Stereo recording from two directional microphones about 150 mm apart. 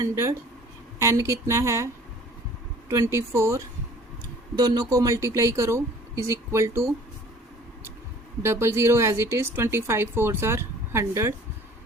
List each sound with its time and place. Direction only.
0.0 s speech: 20° right (ahead or behind)
2.9 s speech: 20° right (ahead or behind)
8.4 s a woman's voice: 15° right (ahead or behind)